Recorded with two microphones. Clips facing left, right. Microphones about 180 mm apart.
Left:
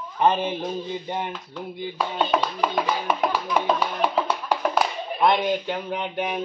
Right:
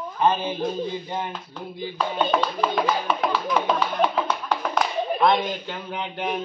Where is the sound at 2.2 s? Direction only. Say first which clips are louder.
Even; 5° left (ahead or behind).